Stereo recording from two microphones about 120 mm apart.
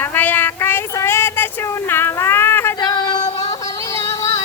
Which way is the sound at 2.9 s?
35° left (ahead or behind).